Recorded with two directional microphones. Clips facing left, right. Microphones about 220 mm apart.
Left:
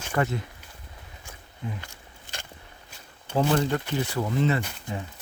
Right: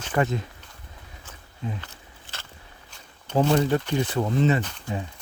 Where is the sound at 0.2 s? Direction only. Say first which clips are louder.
Right 2 dB; 20° right (ahead or behind).